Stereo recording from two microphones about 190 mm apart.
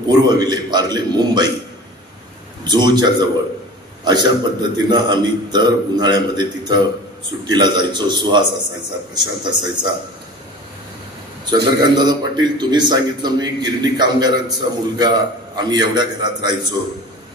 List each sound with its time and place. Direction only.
0.1 s a man's voice: 20° right (ahead or behind)
2.6 s a man's voice: 25° right (ahead or behind)
11.4 s a man's voice: 20° right (ahead or behind)